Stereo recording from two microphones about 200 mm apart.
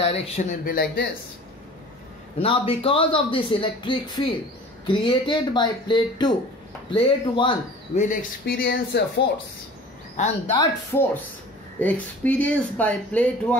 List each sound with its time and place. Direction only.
0.0 s speech: 30° left (ahead or behind); by 1.0 s 45° left (ahead or behind)
2.4 s speech: 30° left (ahead or behind); by 9.2 s 55° left (ahead or behind)
10.1 s speech: 35° left (ahead or behind)
10.5 s speech: 15° left (ahead or behind)